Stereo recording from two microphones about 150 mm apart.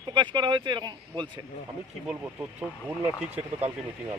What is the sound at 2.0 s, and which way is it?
Speech, 10° right (ahead or behind).